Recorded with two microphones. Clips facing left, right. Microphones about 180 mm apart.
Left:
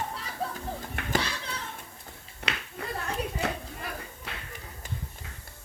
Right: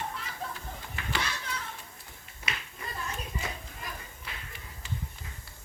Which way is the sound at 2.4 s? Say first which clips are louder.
Left 5 dB; 70° left (ahead or behind).